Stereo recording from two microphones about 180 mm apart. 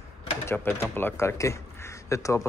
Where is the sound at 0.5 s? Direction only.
10° left (ahead or behind).